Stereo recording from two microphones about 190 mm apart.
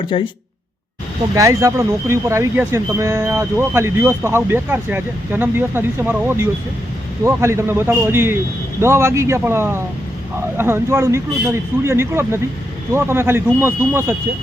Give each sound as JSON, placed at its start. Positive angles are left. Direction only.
{"t": 0.1, "sound": "speech", "side_deg": 25}
{"t": 1.4, "sound": "speech", "side_deg": -15}